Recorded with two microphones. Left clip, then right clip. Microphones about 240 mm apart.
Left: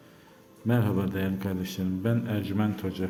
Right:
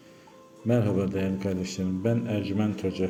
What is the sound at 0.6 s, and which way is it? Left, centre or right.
Speech, centre.